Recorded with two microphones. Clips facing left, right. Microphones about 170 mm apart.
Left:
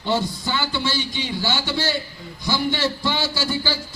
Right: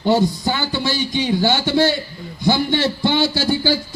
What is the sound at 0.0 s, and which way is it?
A man's voice, 45° right (ahead or behind).